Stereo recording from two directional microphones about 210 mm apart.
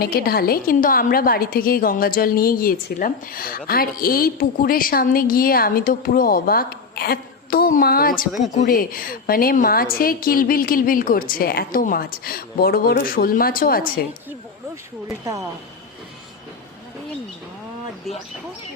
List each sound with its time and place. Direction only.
0.0 s a woman's voice: 45° left (ahead or behind)
15.2 s a woman's voice: 15° right (ahead or behind)